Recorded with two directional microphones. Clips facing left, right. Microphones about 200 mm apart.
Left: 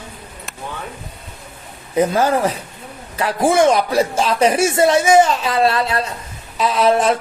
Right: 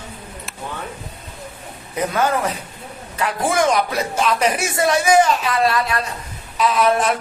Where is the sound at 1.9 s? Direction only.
30° left (ahead or behind).